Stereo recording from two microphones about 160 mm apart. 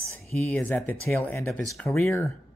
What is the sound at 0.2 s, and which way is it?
Speech, 5° left (ahead or behind).